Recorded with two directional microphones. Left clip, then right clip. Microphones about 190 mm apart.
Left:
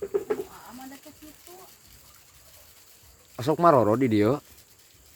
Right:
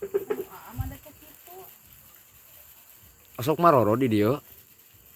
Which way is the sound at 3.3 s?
Centre (ahead or behind).